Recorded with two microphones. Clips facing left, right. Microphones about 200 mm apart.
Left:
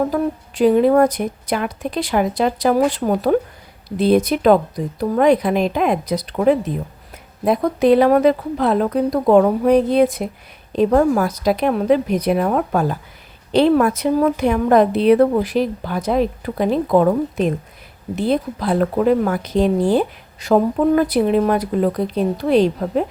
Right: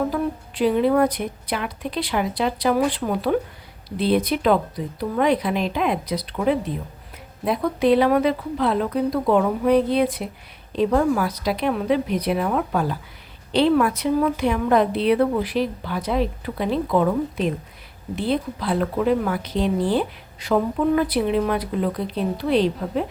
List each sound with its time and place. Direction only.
0.1 s speech: 45° left (ahead or behind)